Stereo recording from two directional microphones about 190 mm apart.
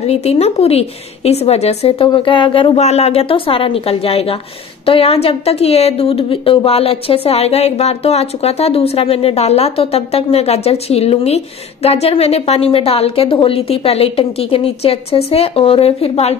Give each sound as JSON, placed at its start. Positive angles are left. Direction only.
{"t": 0.0, "sound": "a woman's voice", "side_deg": 35}